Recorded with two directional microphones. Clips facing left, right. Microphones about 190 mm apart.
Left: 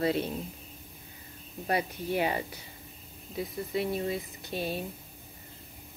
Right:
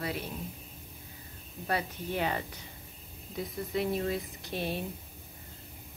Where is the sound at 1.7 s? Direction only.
15° left (ahead or behind).